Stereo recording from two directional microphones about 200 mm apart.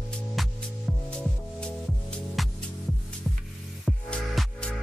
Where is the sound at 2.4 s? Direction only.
Centre (ahead or behind).